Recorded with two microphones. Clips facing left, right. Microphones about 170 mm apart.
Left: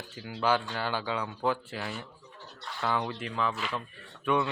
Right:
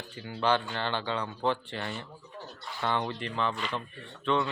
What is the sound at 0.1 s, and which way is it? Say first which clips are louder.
Speech: even; 5° left (ahead or behind).